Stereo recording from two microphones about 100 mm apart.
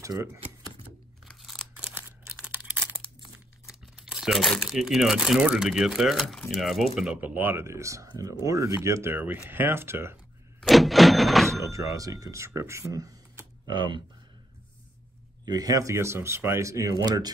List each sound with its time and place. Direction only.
0.0 s speech: 30° right (ahead or behind)
1.2 s crumpling: centre (ahead or behind)
2.0 s crumpling: 15° right (ahead or behind)
3.2 s speech: 5° right (ahead or behind)
7.2 s speech: 20° right (ahead or behind)
10.6 s a sound: centre (ahead or behind)
11.9 s speech: 35° right (ahead or behind)
13.7 s speech: 50° right (ahead or behind)
15.4 s speech: 40° right (ahead or behind)
17.0 s speech: 40° right (ahead or behind)